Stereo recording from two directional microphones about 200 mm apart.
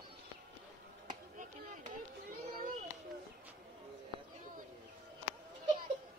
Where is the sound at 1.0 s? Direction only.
40° right (ahead or behind).